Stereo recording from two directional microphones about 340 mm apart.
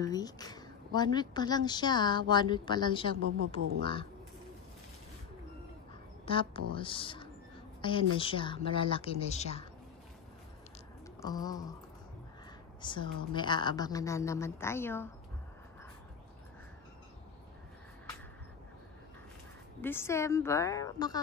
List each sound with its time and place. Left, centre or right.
0.0 s a woman's voice: centre
6.2 s a woman's voice: centre
11.1 s a woman's voice: centre
12.8 s a woman's voice: centre
19.8 s a woman's voice: centre